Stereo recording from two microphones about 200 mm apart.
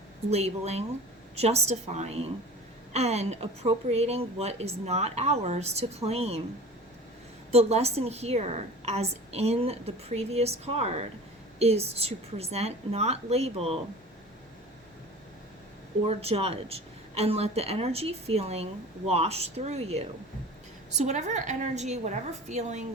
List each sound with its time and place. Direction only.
0.3 s a woman's voice: 30° right (ahead or behind)
7.5 s a woman's voice: 30° right (ahead or behind)
16.0 s a woman's voice: 30° right (ahead or behind)